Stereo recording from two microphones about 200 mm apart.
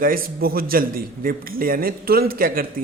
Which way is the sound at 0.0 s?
45° right (ahead or behind).